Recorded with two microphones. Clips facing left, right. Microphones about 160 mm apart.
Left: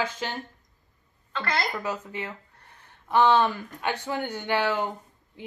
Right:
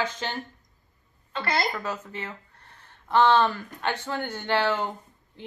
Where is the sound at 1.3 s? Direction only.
15° right (ahead or behind).